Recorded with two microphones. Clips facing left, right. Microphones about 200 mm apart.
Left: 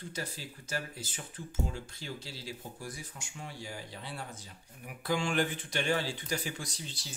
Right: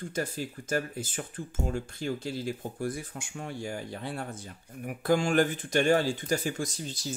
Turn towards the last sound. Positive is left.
turn(degrees=-45)  # may be behind; listen again after turning